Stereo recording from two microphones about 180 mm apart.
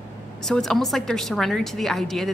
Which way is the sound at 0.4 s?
Centre (ahead or behind).